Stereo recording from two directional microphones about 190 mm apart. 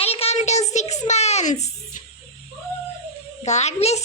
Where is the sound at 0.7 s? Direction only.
35° left (ahead or behind).